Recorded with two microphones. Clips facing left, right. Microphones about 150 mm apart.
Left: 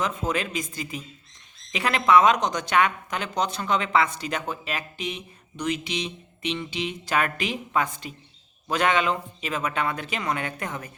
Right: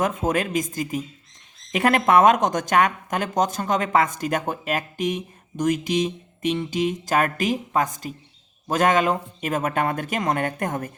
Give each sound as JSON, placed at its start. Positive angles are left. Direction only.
{"t": 0.0, "sound": "speech", "side_deg": -50}